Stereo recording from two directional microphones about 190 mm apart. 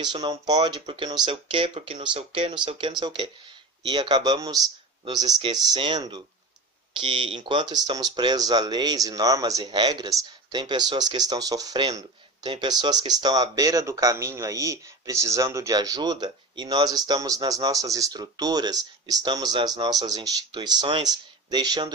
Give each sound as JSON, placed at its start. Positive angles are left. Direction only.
{"t": 0.0, "sound": "speech", "side_deg": -20}